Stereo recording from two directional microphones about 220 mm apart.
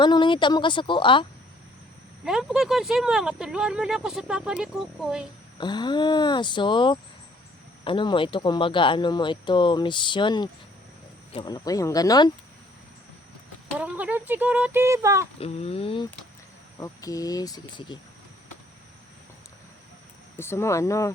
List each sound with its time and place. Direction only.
0.0 s speech: 20° left (ahead or behind)
2.2 s speech: centre (ahead or behind)
5.5 s speech: 20° left (ahead or behind)
13.7 s speech: 5° right (ahead or behind)
15.4 s speech: 25° left (ahead or behind)
20.3 s speech: 10° left (ahead or behind)